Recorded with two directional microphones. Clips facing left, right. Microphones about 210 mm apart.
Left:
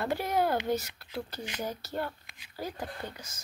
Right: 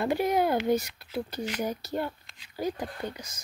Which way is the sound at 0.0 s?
15° right (ahead or behind).